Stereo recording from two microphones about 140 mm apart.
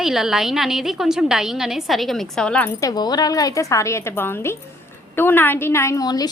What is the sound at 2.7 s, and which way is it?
A woman's voice, 25° left (ahead or behind).